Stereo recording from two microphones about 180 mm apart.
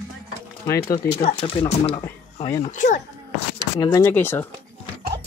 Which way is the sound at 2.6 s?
45° left (ahead or behind).